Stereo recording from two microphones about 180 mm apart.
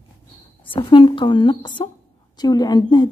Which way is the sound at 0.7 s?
30° left (ahead or behind).